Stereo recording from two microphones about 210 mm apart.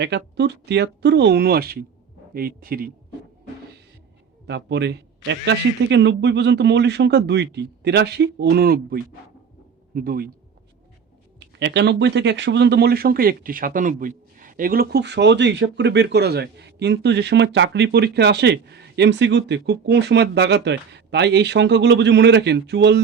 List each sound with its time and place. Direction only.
0.0 s speech: 55° right (ahead or behind)
4.4 s speech: 55° right (ahead or behind)
11.3 s speech: 55° right (ahead or behind)